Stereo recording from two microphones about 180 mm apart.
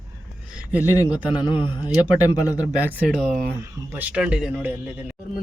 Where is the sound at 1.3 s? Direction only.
25° left (ahead or behind).